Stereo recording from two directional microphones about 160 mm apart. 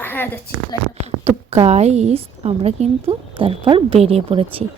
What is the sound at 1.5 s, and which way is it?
A woman's voice, 40° right (ahead or behind).